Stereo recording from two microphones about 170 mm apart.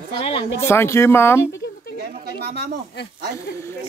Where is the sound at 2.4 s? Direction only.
75° right (ahead or behind).